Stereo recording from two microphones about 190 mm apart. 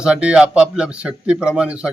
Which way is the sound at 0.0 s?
5° right (ahead or behind).